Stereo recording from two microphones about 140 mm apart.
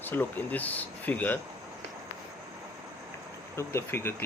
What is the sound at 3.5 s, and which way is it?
Speech, 20° left (ahead or behind).